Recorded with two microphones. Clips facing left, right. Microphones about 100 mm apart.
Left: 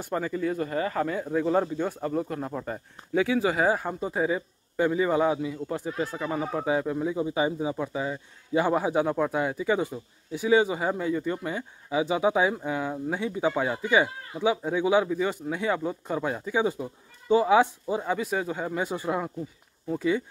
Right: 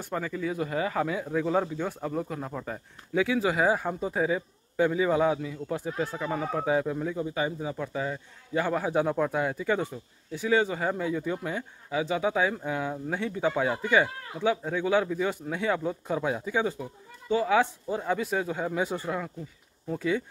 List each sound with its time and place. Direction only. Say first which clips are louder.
0.0 s speech: left 3 dB; 5° left (ahead or behind)
0.6 s speech: left 1 dB; 5° right (ahead or behind)
7.1 s speech: left 3 dB; 15° left (ahead or behind)
8.9 s speech: left 1 dB; 5° left (ahead or behind)
11.1 s speech: left 2 dB; centre (ahead or behind)
11.9 s speech: left 3 dB; 15° left (ahead or behind)
12.6 s speech: left 2 dB; centre (ahead or behind)
16.6 s speech: left 3 dB; 20° left (ahead or behind); by 18.9 s centre (ahead or behind)
18.9 s speech: left 3 dB; 20° left (ahead or behind)
19.9 s speech: left 2 dB; 5° left (ahead or behind)